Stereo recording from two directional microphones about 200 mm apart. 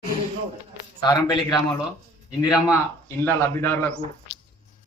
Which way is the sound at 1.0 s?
20° left (ahead or behind).